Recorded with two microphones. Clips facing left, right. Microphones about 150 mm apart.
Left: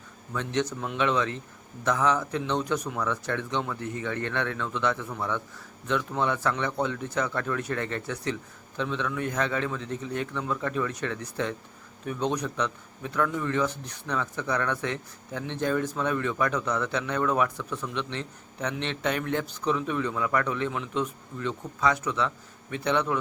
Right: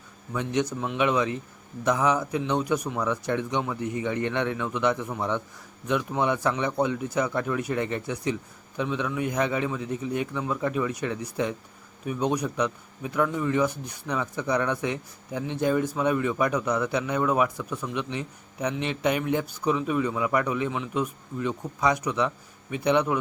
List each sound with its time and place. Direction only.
0.3 s speech: 10° right (ahead or behind)